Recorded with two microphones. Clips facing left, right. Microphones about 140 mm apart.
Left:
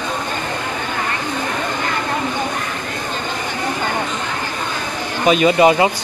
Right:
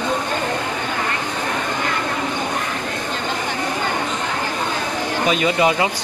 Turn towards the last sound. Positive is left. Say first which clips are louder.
# left 5 dB
turn(degrees=25)  # may be behind; listen again after turning